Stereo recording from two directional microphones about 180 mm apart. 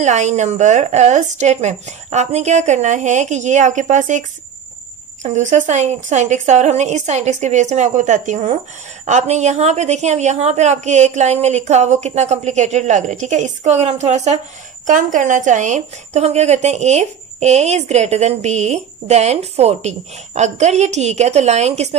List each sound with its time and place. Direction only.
0.0 s speech: 40° right (ahead or behind)
5.2 s speech: 40° right (ahead or behind)